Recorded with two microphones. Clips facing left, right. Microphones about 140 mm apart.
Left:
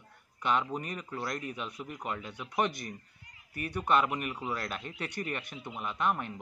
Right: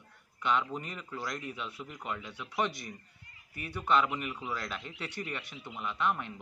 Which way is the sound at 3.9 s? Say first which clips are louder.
Even; 50° left (ahead or behind).